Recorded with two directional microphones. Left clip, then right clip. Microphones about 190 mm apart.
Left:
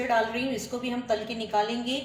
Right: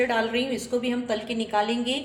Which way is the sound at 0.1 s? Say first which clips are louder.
Right 1 dB; 40° right (ahead or behind).